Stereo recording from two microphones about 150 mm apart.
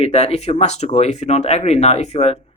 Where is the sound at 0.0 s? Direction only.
40° left (ahead or behind).